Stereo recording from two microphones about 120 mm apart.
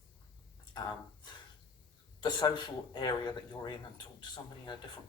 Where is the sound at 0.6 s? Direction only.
35° left (ahead or behind).